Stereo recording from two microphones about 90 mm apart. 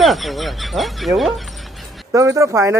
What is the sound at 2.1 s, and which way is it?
Speech, 35° right (ahead or behind).